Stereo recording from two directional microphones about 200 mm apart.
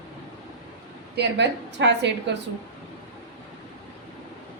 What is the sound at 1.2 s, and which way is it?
A woman's voice, 60° right (ahead or behind).